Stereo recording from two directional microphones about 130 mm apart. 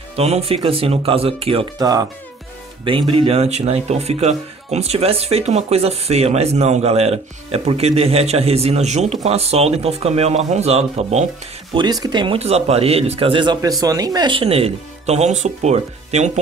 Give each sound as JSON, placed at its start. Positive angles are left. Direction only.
{"t": 0.1, "sound": "speech", "side_deg": -50}
{"t": 1.8, "sound": "speech", "side_deg": -30}
{"t": 2.8, "sound": "speech", "side_deg": -40}
{"t": 11.7, "sound": "speech", "side_deg": -35}
{"t": 12.4, "sound": "speech", "side_deg": -55}
{"t": 13.6, "sound": "speech", "side_deg": -30}